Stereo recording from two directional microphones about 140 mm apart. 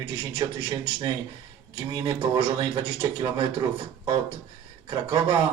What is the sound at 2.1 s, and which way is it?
Speech, 40° right (ahead or behind).